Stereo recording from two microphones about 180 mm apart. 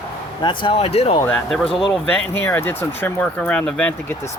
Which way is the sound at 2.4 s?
10° left (ahead or behind).